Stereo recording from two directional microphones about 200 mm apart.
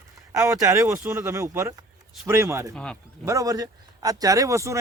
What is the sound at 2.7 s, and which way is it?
Speech, 5° left (ahead or behind).